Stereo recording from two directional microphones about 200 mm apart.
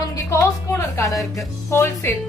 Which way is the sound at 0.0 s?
15° left (ahead or behind).